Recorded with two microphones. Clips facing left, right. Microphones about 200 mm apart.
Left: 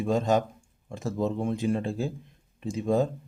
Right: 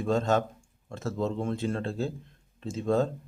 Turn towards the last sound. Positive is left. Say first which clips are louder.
# left 1 dB
turn(degrees=15)  # may be behind; listen again after turning